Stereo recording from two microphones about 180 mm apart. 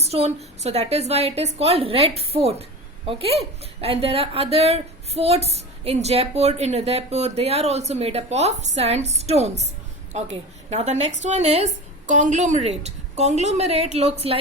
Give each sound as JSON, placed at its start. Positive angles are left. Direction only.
{"t": 0.0, "sound": "speech", "side_deg": -35}